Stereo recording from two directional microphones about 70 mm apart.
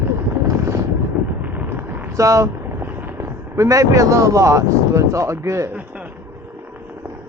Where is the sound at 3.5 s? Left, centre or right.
Right.